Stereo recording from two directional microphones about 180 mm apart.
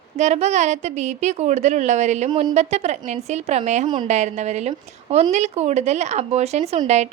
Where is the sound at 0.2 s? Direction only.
40° right (ahead or behind).